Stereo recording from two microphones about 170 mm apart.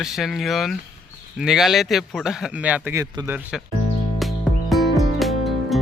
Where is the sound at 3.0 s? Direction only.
20° right (ahead or behind).